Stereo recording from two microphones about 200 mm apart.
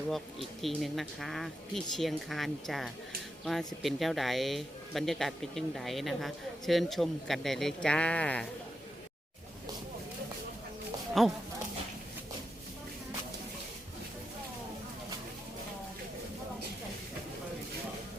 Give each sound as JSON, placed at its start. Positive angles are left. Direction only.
{"t": 0.1, "sound": "speech", "side_deg": 0}
{"t": 11.2, "sound": "speech", "side_deg": 0}